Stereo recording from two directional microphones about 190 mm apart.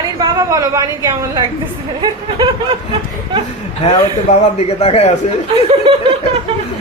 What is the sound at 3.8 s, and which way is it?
Speech, 30° left (ahead or behind).